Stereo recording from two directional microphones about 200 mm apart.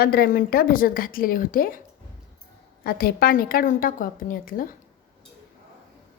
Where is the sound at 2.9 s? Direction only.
50° left (ahead or behind).